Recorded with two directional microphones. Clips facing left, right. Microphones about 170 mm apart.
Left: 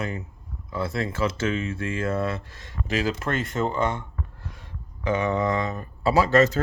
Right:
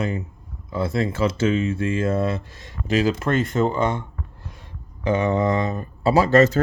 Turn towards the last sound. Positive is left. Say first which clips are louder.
# right 3 dB
turn(degrees=-35)  # may be behind; listen again after turning